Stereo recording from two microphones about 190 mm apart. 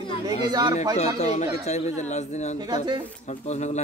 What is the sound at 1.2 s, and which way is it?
A man's voice, 35° left (ahead or behind).